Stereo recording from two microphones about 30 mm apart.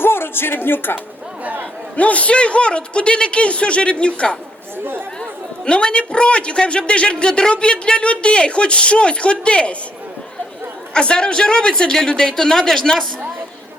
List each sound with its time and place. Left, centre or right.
2.0 s a man's voice: left
2.3 s a man's voice: left
5.6 s a man's voice: left
10.9 s a man's voice: left